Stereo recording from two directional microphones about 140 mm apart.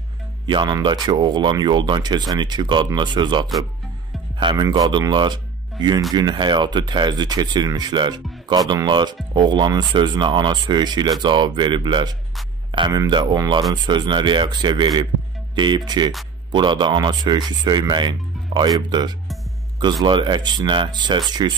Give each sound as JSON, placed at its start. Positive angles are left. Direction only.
{"t": 0.5, "sound": "speech", "side_deg": -35}